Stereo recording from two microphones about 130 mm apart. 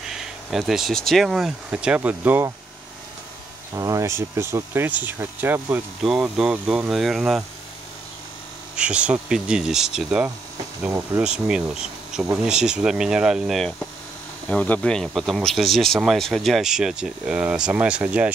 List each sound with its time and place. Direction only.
0.0 s speech: 5° right (ahead or behind)
3.7 s speech: 25° right (ahead or behind)
6.0 s speech: 5° right (ahead or behind)
8.7 s speech: 10° right (ahead or behind)